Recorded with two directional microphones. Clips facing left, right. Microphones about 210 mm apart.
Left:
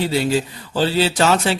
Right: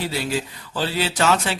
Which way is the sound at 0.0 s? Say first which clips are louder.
Left 6 dB; 25° left (ahead or behind).